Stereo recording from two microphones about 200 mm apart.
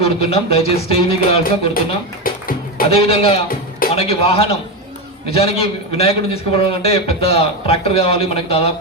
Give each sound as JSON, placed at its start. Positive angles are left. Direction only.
{"t": 0.0, "sound": "a man's voice", "side_deg": 30}
{"t": 2.2, "sound": "music", "side_deg": 45}
{"t": 2.9, "sound": "a man's voice", "side_deg": 30}